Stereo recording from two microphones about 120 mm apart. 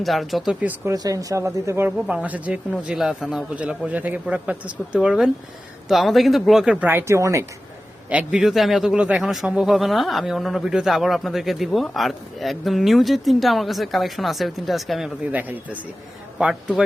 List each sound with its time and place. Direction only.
0.0 s speech: centre (ahead or behind)
0.9 s speech: 30° right (ahead or behind)
2.0 s a man's voice: 10° right (ahead or behind)
8.3 s speech: 5° right (ahead or behind)
15.3 s a man's voice: 15° right (ahead or behind)